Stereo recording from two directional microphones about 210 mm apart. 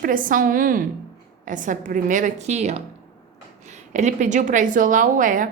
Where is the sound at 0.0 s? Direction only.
40° right (ahead or behind).